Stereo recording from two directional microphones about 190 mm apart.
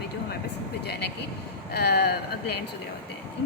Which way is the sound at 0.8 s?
60° left (ahead or behind).